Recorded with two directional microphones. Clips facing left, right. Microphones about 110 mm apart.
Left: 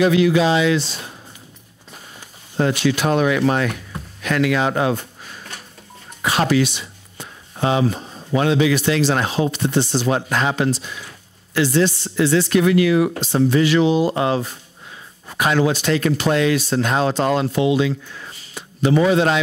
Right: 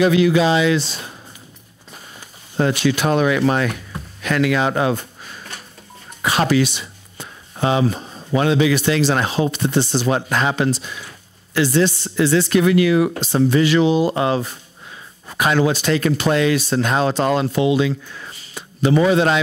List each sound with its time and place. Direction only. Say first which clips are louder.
0.0 s speech: right 1 dB; 15° right (ahead or behind)
2.1 s a sound: right 1 dB; 15° right (ahead or behind)
8.5 s speech: even; 15° right (ahead or behind)